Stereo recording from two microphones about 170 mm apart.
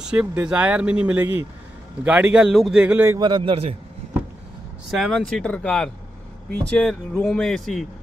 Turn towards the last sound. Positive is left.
turn(degrees=0)  # may be behind; listen again after turning